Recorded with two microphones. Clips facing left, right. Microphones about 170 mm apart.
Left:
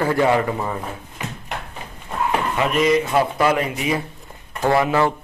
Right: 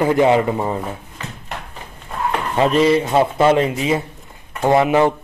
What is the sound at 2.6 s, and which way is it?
Speech, 30° right (ahead or behind).